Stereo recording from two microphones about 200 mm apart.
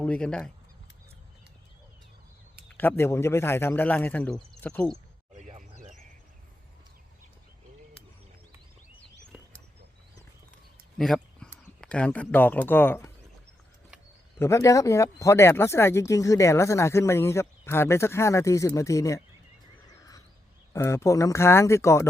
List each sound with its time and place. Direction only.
0.0 s speech: 5° left (ahead or behind)
2.7 s speech: 10° left (ahead or behind)
5.3 s a sound: 35° right (ahead or behind)
10.9 s speech: centre (ahead or behind)
14.3 s speech: 15° left (ahead or behind)
20.7 s speech: 15° left (ahead or behind)